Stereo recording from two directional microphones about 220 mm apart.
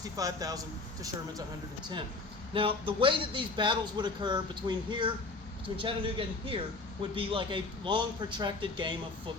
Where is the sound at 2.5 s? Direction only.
25° right (ahead or behind).